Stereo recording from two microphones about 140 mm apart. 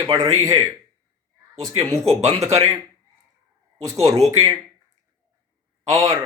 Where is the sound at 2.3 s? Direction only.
25° right (ahead or behind).